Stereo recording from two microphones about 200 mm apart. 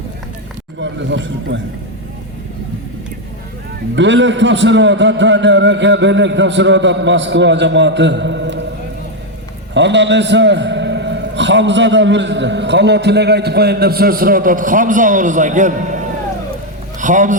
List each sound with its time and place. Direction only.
0.8 s a man's voice: 65° right (ahead or behind)
3.9 s a man's voice: 65° right (ahead or behind)
9.7 s a man's voice: 60° right (ahead or behind); by 17.3 s 40° right (ahead or behind)